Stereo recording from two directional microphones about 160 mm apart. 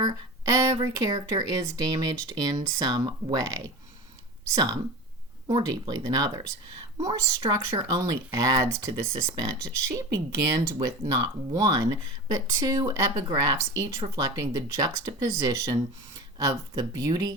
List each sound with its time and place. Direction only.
0.0 s speech: 25° right (ahead or behind)